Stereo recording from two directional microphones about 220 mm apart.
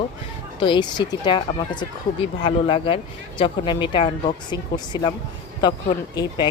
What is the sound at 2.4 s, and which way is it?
Speech, 25° left (ahead or behind).